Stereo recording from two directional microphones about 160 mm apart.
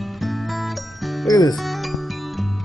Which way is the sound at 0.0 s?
Centre (ahead or behind).